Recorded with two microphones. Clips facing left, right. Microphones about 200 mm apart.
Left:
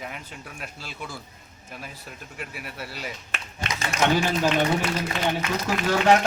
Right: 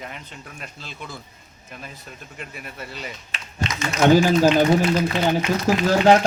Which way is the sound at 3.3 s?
55° left (ahead or behind).